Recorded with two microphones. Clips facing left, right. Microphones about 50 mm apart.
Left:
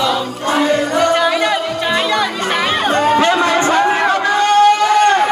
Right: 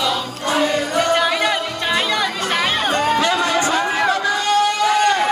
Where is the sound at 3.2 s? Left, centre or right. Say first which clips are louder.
Left 4 dB; left.